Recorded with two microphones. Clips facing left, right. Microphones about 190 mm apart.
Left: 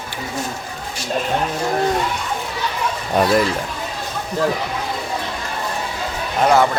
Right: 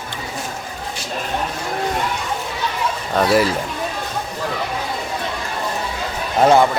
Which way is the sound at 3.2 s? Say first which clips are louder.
Right 1 dB; 5° right (ahead or behind).